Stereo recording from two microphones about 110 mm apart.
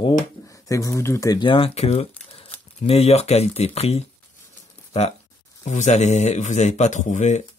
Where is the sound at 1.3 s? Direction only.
50° left (ahead or behind); by 5.2 s 70° left (ahead or behind).